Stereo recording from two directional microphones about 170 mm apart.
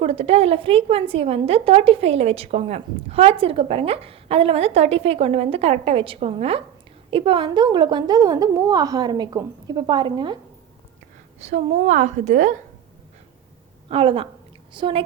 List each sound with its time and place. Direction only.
0.0 s a woman's voice: 35° right (ahead or behind)
11.3 s a woman's voice: 40° right (ahead or behind)
13.8 s a woman's voice: 35° right (ahead or behind)